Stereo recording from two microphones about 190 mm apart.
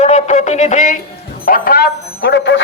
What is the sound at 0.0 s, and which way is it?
A man's voice, 35° left (ahead or behind).